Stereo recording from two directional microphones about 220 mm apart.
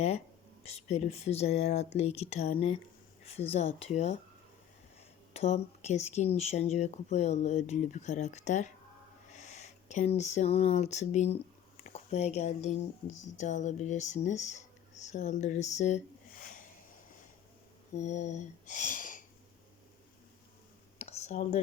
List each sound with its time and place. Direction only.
0.6 s speech: 30° left (ahead or behind)
5.3 s speech: 30° left (ahead or behind)
17.9 s speech: 30° left (ahead or behind)
21.0 s a sound: 30° left (ahead or behind)